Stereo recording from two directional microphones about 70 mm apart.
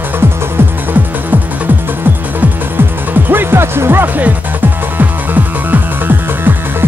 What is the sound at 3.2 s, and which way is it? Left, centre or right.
Music, right.